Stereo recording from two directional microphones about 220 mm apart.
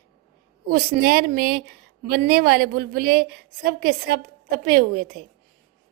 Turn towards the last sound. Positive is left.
turn(degrees=-40)  # may be behind; listen again after turning